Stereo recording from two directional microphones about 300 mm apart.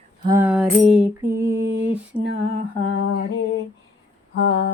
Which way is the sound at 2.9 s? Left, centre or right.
Left.